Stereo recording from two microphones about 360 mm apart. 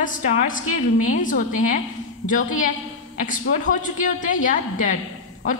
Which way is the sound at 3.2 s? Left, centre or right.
Left.